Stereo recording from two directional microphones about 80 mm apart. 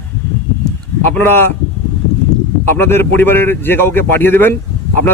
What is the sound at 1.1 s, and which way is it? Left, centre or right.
Speech, left.